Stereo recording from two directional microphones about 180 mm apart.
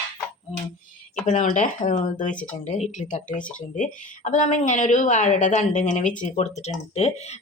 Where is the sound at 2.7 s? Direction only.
40° left (ahead or behind).